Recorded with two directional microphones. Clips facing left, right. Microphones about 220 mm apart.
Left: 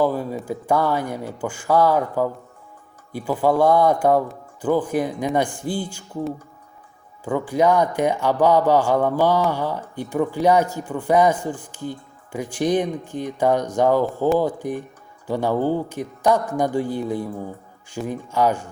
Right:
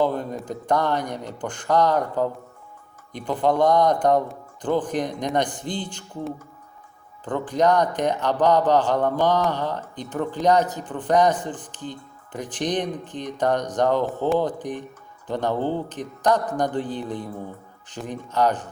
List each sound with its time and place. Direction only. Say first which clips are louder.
0.0 s speech: left 2 dB; 5° left (ahead or behind)